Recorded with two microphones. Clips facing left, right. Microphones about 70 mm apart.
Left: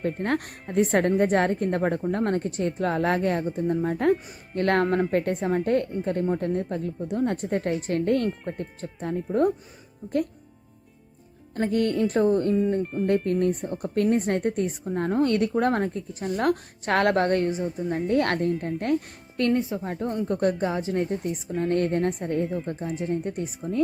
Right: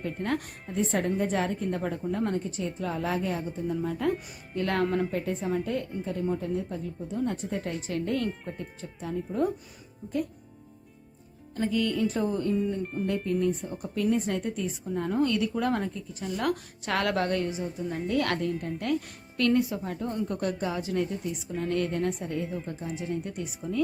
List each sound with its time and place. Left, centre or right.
0.0 s speech: left
5.1 s speech: left
11.5 s speech: left
12.8 s speech: centre
13.1 s speech: left
14.8 s speech: left
17.6 s a woman's voice: left
19.5 s a woman's voice: left
21.2 s speech: left
22.6 s a woman's voice: left